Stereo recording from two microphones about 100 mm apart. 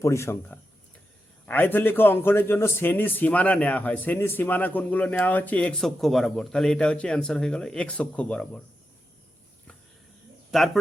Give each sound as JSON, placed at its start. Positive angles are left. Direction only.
{"t": 0.0, "sound": "a man's voice", "side_deg": 30}
{"t": 10.5, "sound": "speech", "side_deg": 0}